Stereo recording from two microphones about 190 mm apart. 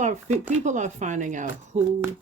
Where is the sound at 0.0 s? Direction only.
40° right (ahead or behind).